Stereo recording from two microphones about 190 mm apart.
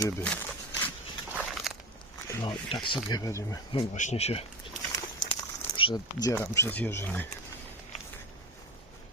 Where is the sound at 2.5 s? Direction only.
25° left (ahead or behind).